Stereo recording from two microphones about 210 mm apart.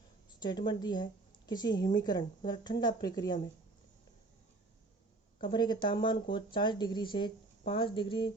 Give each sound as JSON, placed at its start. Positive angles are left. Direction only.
{"t": 0.3, "sound": "speech", "side_deg": 20}
{"t": 5.4, "sound": "speech", "side_deg": 20}